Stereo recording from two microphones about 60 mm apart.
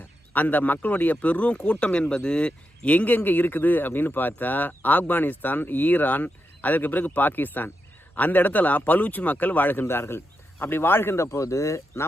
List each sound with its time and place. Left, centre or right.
0.3 s speech: left